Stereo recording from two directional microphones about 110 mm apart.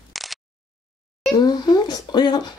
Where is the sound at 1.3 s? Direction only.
40° left (ahead or behind).